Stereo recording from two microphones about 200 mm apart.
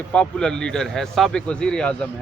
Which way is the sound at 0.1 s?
5° left (ahead or behind).